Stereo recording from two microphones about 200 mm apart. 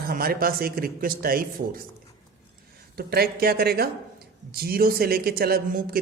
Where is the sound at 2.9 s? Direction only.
50° right (ahead or behind).